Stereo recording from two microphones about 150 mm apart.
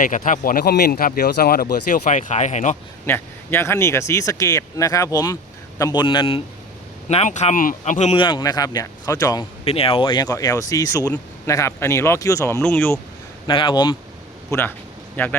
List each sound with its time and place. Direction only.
0.0 s speech: 65° left (ahead or behind)
3.1 s speech: 15° left (ahead or behind); by 6.4 s 35° left (ahead or behind)
7.1 s speech: 45° left (ahead or behind)
8.1 s speech: 30° left (ahead or behind)
9.6 s speech: 40° left (ahead or behind); by 12.6 s 20° left (ahead or behind)
12.6 s speech: 10° left (ahead or behind)
13.5 s speech: 30° left (ahead or behind)
14.5 s a man's voice: 20° left (ahead or behind)